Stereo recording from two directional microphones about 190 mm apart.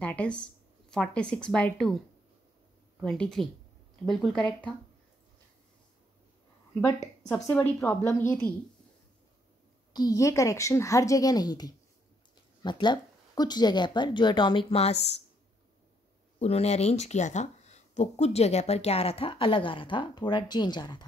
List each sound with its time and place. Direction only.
0.0 s a woman's voice: 5° left (ahead or behind)
7.2 s speech: 10° left (ahead or behind)
9.9 s speech: 20° left (ahead or behind); by 15.2 s 35° left (ahead or behind)
16.3 s speech: 35° left (ahead or behind)